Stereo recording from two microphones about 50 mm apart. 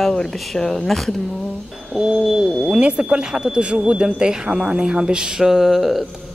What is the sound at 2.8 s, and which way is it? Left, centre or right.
Speech, right.